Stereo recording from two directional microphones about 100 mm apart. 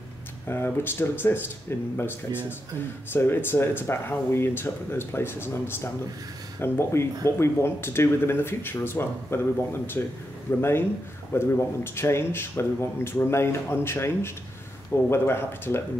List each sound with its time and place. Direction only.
0.5 s speech: 20° left (ahead or behind)